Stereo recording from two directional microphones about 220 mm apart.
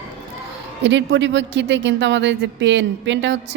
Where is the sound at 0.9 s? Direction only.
55° right (ahead or behind).